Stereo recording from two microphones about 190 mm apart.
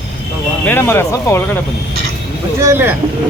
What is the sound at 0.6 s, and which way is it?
Speech, 10° left (ahead or behind).